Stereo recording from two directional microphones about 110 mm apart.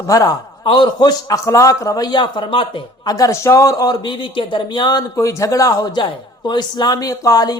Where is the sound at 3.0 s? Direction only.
30° left (ahead or behind).